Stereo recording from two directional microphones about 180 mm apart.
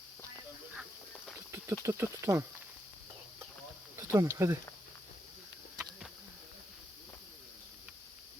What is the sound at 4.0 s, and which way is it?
Speech, 15° right (ahead or behind).